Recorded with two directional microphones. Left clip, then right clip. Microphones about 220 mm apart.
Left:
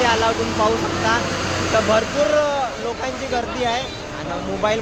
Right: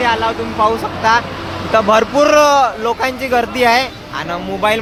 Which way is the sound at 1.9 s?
25° right (ahead or behind).